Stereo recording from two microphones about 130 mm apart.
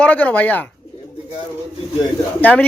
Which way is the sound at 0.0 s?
10° left (ahead or behind).